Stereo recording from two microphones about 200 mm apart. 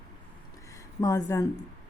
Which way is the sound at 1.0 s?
15° left (ahead or behind).